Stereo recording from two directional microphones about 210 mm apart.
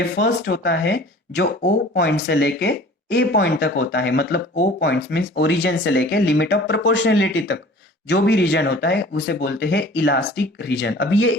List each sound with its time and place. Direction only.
0.0 s speech: 55° left (ahead or behind)